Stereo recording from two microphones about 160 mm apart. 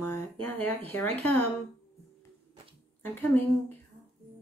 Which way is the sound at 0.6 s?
10° left (ahead or behind).